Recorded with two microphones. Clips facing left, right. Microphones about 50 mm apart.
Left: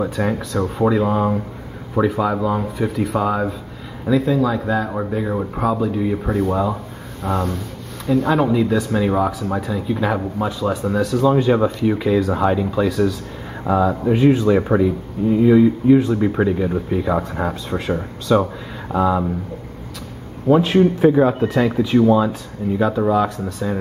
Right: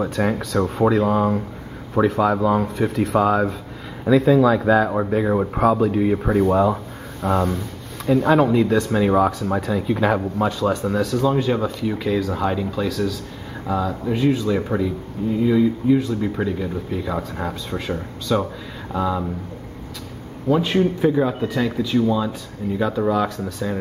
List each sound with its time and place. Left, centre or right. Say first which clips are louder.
0.4 s speech: even; centre
10.6 s speech: left 1 dB; centre
11.5 s speech: left 5 dB; centre
20.4 s speech: left 4 dB; centre
22.8 s speech: left 3 dB; centre